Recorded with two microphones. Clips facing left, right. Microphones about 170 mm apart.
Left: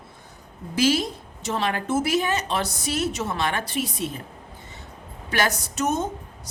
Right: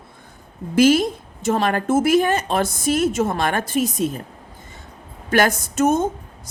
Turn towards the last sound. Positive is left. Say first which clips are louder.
# right 7 dB
turn(degrees=-50)  # may be behind; listen again after turning